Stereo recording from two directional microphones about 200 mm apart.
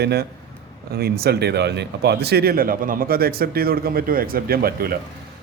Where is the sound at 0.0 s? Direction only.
55° right (ahead or behind).